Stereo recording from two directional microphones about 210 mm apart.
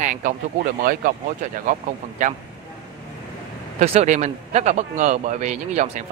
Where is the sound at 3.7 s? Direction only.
30° right (ahead or behind).